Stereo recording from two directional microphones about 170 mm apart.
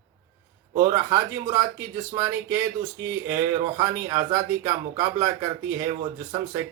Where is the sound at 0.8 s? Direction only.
20° right (ahead or behind).